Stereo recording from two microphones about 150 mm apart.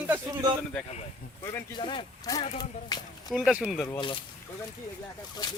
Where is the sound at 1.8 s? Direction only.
30° left (ahead or behind).